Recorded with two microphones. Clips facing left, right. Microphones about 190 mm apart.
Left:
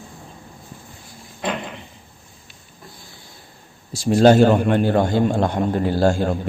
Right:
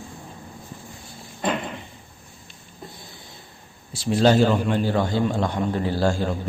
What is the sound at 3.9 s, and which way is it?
A man's voice, 45° left (ahead or behind).